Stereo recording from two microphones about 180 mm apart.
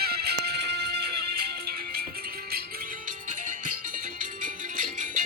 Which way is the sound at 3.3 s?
45° right (ahead or behind).